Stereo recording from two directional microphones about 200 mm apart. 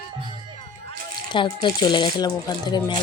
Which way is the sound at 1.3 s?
20° left (ahead or behind).